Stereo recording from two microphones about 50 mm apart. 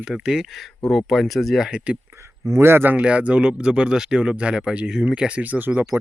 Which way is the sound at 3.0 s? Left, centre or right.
Right.